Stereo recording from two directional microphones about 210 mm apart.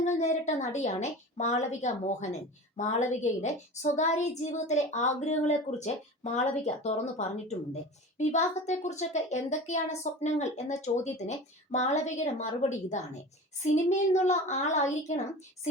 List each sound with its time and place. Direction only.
0.0 s a woman's voice: 35° left (ahead or behind)